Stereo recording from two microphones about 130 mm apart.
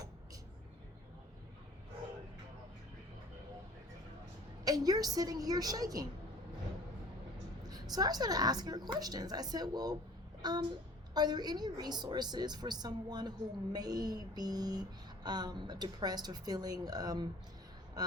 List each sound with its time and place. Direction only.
4.6 s a woman's voice: 30° right (ahead or behind)
7.7 s a sound: 30° right (ahead or behind)
18.0 s a woman's voice: 30° right (ahead or behind)